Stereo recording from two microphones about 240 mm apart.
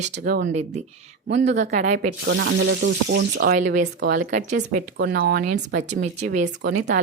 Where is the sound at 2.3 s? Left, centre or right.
Right.